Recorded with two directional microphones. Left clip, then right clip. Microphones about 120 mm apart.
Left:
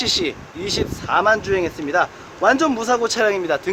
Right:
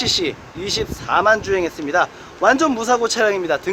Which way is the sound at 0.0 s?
10° right (ahead or behind).